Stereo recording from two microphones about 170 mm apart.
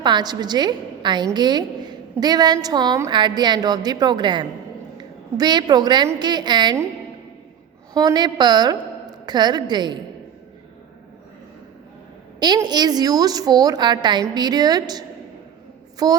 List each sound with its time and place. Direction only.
0.0 s a woman's voice: 25° right (ahead or behind)
7.9 s a woman's voice: 25° right (ahead or behind)
12.4 s a woman's voice: 25° right (ahead or behind)